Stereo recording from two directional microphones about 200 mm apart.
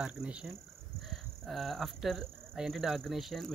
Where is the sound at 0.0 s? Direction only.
5° right (ahead or behind).